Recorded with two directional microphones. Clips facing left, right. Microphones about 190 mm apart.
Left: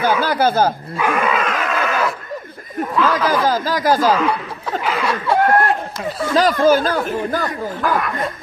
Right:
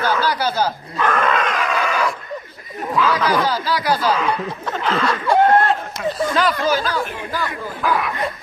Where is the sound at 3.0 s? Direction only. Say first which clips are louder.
Left 1 dB; 5° left (ahead or behind).